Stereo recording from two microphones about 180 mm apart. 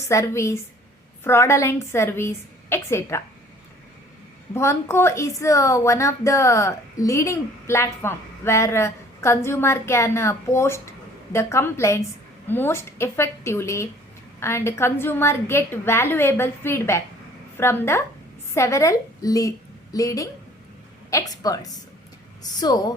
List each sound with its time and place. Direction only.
0.1 s speech: 15° left (ahead or behind)
4.5 s a woman's voice: 15° left (ahead or behind)